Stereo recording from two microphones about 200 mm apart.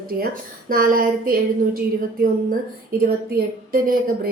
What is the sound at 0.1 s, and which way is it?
A woman's voice, 50° right (ahead or behind).